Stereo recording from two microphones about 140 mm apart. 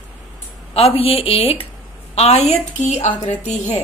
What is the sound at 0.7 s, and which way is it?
A woman's voice, 45° left (ahead or behind).